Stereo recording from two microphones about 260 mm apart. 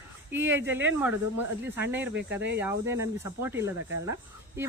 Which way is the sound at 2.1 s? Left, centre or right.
Right.